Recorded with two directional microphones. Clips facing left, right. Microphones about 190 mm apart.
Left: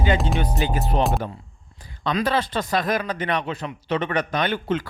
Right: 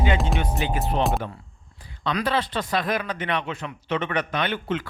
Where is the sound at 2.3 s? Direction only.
45° left (ahead or behind).